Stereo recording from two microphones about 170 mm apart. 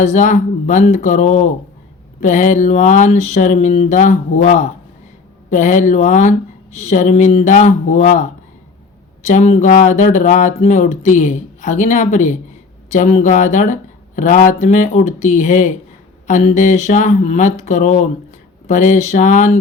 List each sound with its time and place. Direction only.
0.0 s speech: 45° left (ahead or behind)